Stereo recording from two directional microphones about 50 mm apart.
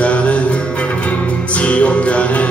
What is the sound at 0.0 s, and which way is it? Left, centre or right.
Music, left.